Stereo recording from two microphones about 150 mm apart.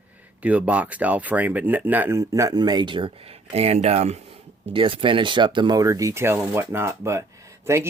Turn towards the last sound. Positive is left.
turn(degrees=-20)  # may be behind; listen again after turning